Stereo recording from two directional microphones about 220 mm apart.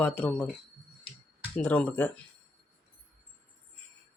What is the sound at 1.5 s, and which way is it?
Speech, 5° left (ahead or behind).